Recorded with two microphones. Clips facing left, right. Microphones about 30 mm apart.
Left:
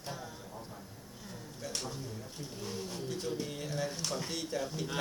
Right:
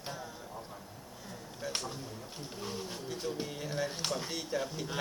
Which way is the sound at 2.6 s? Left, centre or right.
Right.